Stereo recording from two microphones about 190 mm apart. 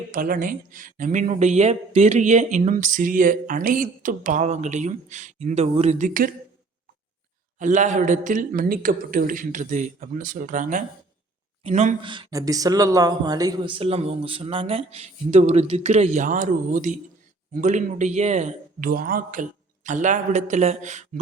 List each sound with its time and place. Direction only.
0.1 s speech: 45° right (ahead or behind)
7.6 s a man's voice: 40° right (ahead or behind)
12.0 s speech: 25° right (ahead or behind)